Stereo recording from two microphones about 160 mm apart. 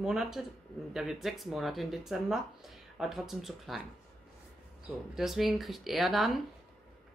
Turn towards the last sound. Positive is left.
turn(degrees=0)  # may be behind; listen again after turning